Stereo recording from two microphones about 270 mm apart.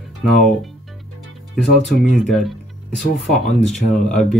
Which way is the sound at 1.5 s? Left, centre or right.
Centre.